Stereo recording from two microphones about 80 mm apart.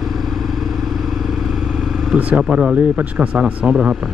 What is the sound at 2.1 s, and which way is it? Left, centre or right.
Speech, centre.